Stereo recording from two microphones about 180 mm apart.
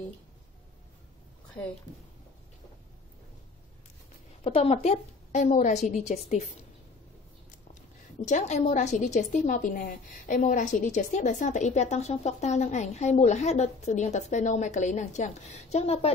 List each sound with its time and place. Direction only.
4.4 s a woman's voice: 30° left (ahead or behind)
8.3 s a woman's voice: 40° left (ahead or behind)